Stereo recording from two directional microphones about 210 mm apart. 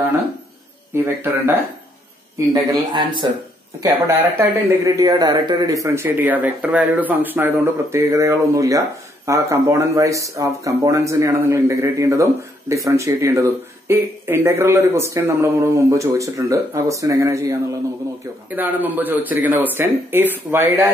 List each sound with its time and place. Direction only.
0.9 s speech: 10° right (ahead or behind)
4.4 s speech: 15° right (ahead or behind)